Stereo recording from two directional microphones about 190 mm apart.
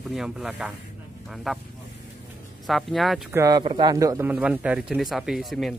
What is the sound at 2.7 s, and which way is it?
Speech, centre (ahead or behind).